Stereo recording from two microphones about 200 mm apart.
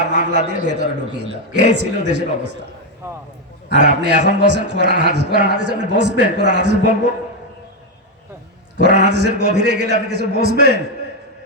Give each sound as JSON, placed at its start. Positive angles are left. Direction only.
{"t": 0.1, "sound": "a man's voice", "side_deg": -55}
{"t": 4.0, "sound": "a man's voice", "side_deg": -60}
{"t": 8.8, "sound": "a man's voice", "side_deg": -60}